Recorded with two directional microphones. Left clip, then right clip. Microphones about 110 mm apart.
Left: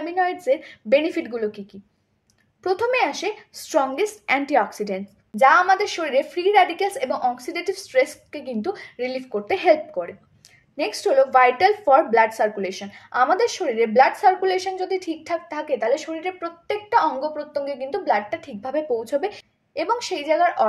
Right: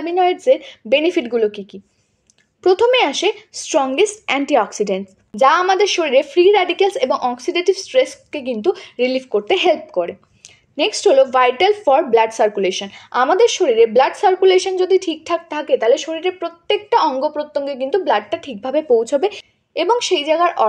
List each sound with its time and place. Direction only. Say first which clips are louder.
0.2 s a woman's voice: right 7 dB; 25° right (ahead or behind)
2.8 s a woman's voice: right 5 dB; 30° right (ahead or behind)
5.3 s a woman's voice: right 2 dB; 35° right (ahead or behind)